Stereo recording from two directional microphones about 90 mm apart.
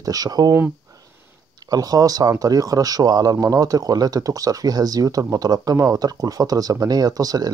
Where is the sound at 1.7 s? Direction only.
45° right (ahead or behind).